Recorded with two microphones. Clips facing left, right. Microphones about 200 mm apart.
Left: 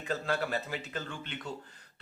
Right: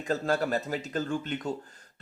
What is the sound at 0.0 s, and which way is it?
Speech, 40° right (ahead or behind).